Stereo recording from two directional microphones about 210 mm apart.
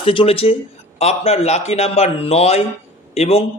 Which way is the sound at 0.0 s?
25° left (ahead or behind).